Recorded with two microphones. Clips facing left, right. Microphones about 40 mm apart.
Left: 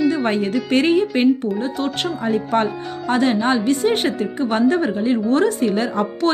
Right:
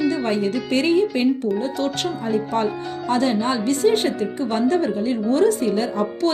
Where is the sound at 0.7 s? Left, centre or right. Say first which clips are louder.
Left 2 dB; left.